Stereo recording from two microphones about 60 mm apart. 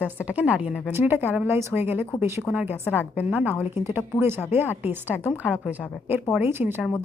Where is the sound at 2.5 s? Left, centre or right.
Centre.